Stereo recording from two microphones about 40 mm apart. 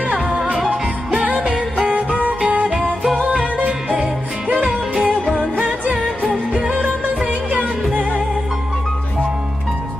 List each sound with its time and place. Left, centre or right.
1.1 s music: right
2.8 s music: centre
6.7 s music: right